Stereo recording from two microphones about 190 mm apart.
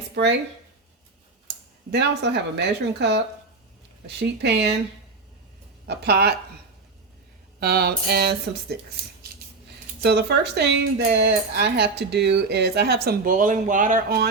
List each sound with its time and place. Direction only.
1.9 s speech: 65° right (ahead or behind)
5.9 s speech: 60° right (ahead or behind)
7.6 s speech: 55° right (ahead or behind)
10.0 s speech: 60° right (ahead or behind); by 14.2 s 45° right (ahead or behind)